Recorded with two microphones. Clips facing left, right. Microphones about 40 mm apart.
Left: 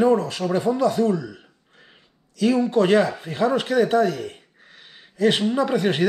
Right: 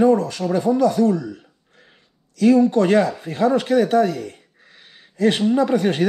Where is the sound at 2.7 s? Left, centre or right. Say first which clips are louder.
Right 1 dB; left.